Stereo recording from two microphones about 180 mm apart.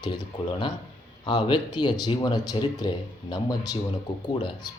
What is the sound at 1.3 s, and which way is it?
Speech, 25° left (ahead or behind).